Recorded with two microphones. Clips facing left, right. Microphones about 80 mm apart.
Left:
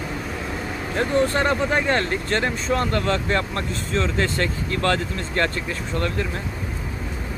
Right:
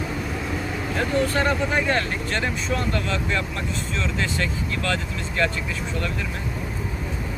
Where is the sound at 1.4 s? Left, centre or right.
Left.